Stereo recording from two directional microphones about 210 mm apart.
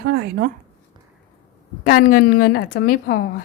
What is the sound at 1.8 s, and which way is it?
A woman's voice, 45° left (ahead or behind).